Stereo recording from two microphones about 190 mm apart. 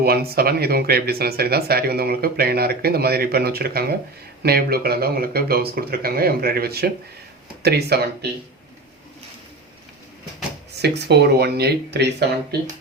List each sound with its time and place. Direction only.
0.0 s a man's voice: 55° right (ahead or behind)
10.8 s speech: 60° right (ahead or behind)